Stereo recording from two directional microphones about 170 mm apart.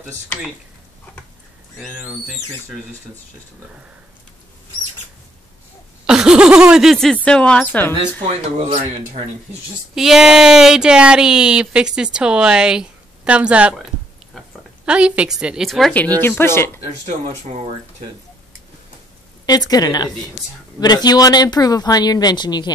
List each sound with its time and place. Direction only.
1.8 s speech: centre (ahead or behind)
6.0 s speech: 5° right (ahead or behind)
8.5 s speech: 40° right (ahead or behind)
9.9 s speech: centre (ahead or behind)
14.9 s speech: 5° right (ahead or behind); by 16.8 s 15° left (ahead or behind)
16.8 s speech: 40° right (ahead or behind)
19.4 s speech: 20° left (ahead or behind)